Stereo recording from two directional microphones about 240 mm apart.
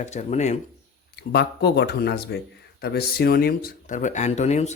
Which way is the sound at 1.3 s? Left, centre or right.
Left.